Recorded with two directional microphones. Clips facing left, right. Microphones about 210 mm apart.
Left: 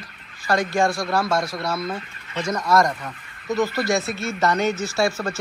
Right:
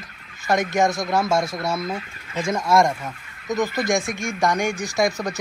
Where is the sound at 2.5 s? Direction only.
25° right (ahead or behind).